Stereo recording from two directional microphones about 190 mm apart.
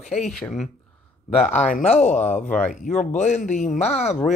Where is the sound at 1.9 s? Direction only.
40° left (ahead or behind).